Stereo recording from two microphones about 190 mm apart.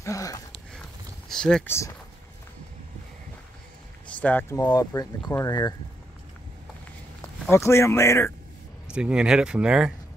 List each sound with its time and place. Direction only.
0.0 s a sound: 15° left (ahead or behind)
1.3 s speech: 5° left (ahead or behind)
4.1 s speech: 5° left (ahead or behind)
7.5 s speech: 15° left (ahead or behind)
8.9 s speech: 5° right (ahead or behind)